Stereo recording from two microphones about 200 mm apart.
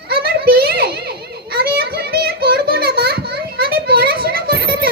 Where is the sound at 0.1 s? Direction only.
50° right (ahead or behind).